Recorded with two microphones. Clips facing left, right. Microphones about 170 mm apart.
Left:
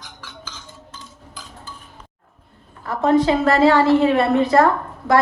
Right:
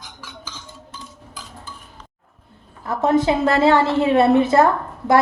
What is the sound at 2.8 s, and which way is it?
A woman's voice, 20° right (ahead or behind).